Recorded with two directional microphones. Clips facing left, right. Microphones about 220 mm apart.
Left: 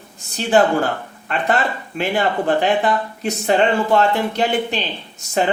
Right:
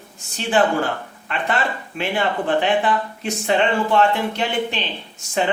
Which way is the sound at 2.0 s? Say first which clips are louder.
Left 3 dB; 40° left (ahead or behind).